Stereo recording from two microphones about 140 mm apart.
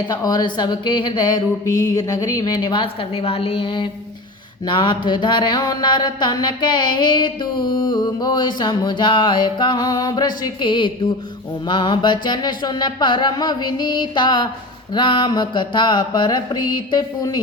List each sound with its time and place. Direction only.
0.1 s mantra: 30° left (ahead or behind)